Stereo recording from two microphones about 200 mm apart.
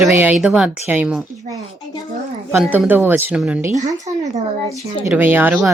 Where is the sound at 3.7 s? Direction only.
35° right (ahead or behind).